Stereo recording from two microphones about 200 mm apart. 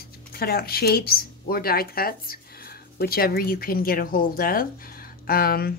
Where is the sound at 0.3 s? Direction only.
50° left (ahead or behind).